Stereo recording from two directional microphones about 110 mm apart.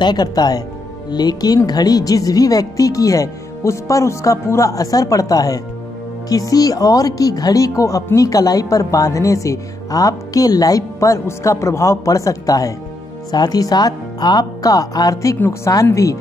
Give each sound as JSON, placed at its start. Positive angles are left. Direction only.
{"t": 0.0, "sound": "a woman's voice", "side_deg": 40}